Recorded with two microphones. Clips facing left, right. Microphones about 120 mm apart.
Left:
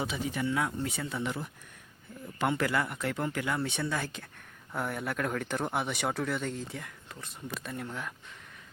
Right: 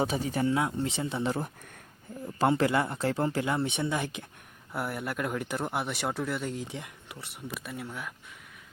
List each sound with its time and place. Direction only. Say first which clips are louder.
0.0 s speech: right 5 dB; 40° right (ahead or behind)
0.5 s speech: right 3 dB; 25° right (ahead or behind)
4.7 s speech: even; 5° right (ahead or behind)